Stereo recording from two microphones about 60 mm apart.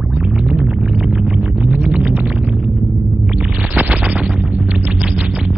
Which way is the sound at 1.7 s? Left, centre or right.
Right.